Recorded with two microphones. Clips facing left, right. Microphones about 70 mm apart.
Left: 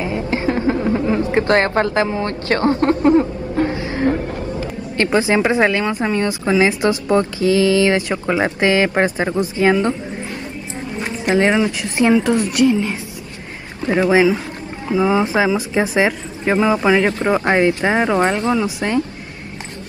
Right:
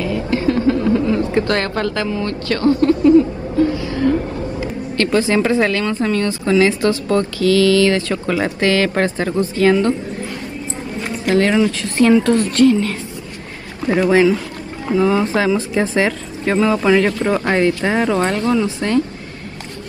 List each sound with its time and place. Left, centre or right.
0.0 s a woman's voice: left
3.7 s a sound: left
4.9 s a woman's voice: left
11.0 s a woman's voice: left